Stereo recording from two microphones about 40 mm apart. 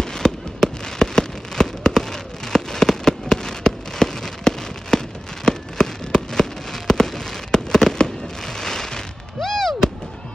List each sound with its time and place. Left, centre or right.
0.0 s fireworks: centre